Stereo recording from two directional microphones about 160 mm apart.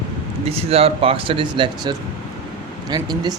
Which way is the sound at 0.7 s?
40° right (ahead or behind).